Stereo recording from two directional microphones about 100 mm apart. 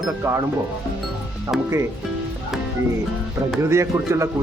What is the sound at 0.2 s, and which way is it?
Speech, 25° right (ahead or behind).